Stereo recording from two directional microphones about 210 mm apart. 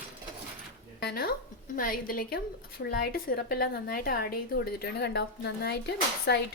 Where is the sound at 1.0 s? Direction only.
45° left (ahead or behind).